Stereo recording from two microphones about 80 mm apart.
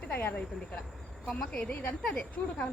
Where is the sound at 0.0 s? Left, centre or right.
Left.